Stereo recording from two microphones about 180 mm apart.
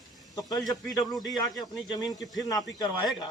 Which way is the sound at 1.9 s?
20° left (ahead or behind).